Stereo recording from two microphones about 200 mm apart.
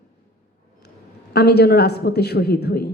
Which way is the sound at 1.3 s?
55° left (ahead or behind).